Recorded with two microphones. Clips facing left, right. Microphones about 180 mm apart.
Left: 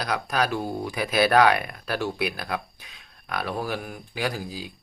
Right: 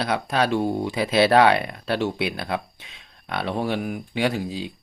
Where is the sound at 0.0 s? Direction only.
25° right (ahead or behind).